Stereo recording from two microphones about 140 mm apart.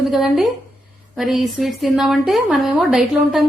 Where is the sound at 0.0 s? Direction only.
Centre (ahead or behind).